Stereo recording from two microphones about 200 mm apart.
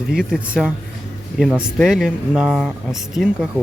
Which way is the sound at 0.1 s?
5° right (ahead or behind).